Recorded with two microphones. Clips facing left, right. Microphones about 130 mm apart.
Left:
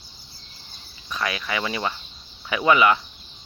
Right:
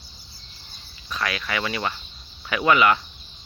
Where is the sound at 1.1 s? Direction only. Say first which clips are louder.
Even; 20° left (ahead or behind).